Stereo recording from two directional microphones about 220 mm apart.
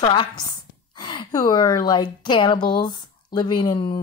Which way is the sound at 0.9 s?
20° left (ahead or behind).